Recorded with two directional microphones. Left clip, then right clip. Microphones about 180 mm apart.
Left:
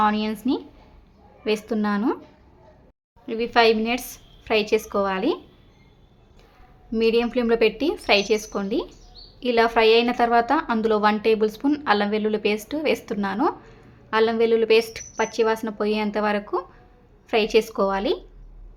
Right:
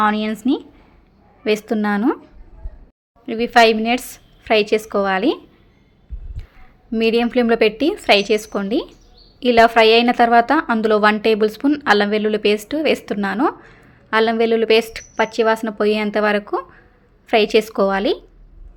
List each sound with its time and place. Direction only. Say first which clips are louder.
0.0 s a woman's voice: right 4 dB; 25° right (ahead or behind)
3.2 s a woman's voice: right 5 dB; 30° right (ahead or behind)
6.9 s a woman's voice: right 4 dB; 25° right (ahead or behind)